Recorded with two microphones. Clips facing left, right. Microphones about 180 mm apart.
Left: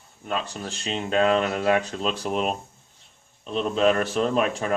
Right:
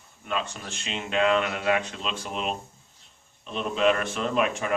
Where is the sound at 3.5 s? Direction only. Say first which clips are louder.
Left 3 dB; 40° left (ahead or behind).